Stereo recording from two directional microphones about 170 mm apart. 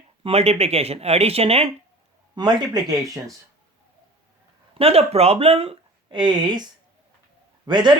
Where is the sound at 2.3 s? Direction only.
25° right (ahead or behind).